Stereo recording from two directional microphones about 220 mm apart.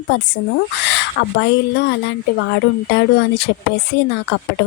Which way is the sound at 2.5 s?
50° left (ahead or behind).